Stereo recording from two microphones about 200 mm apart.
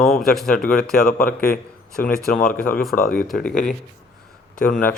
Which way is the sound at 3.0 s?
45° left (ahead or behind).